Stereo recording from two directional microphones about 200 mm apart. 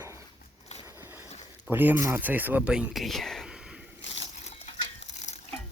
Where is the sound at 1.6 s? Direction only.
10° right (ahead or behind).